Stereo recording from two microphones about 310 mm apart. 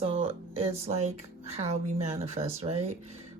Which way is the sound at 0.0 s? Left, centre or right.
Centre.